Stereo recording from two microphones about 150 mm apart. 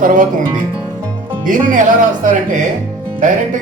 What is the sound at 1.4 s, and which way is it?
Speech, 60° right (ahead or behind).